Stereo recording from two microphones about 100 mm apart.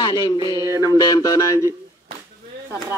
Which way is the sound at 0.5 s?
25° right (ahead or behind).